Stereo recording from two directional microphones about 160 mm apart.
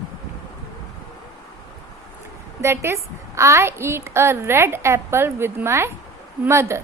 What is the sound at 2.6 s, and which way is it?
A woman's voice, 15° right (ahead or behind).